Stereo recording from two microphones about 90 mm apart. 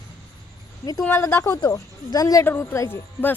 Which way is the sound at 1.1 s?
30° left (ahead or behind).